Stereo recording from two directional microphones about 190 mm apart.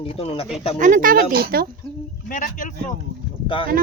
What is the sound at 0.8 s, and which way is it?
Speech, 45° right (ahead or behind).